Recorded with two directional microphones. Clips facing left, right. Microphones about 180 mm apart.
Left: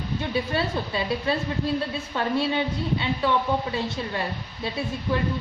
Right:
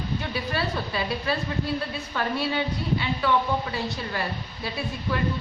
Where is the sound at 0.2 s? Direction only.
25° left (ahead or behind).